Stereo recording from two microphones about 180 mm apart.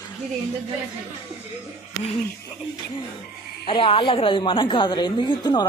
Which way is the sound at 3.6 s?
30° left (ahead or behind).